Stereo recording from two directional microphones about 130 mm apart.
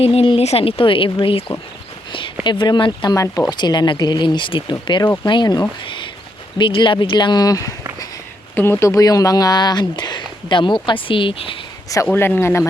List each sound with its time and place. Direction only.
0.0 s speech: 50° left (ahead or behind)
2.4 s speech: 35° left (ahead or behind)
8.5 s speech: 15° left (ahead or behind); by 11.5 s 40° left (ahead or behind)
12.0 s speech: 15° left (ahead or behind)